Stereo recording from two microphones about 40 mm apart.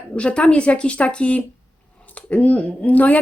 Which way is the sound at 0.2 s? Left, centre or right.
Left.